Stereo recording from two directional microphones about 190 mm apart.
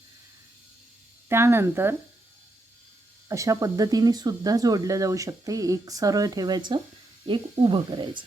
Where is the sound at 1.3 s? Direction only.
15° right (ahead or behind).